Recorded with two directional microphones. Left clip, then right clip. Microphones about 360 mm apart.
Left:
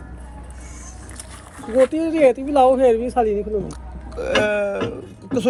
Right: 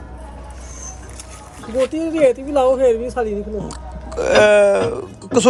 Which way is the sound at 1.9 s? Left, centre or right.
Centre.